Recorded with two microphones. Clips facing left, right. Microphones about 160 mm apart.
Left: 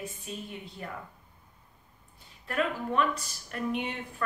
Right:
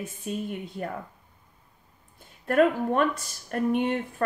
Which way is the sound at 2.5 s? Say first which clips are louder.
Right 9 dB; 50° right (ahead or behind).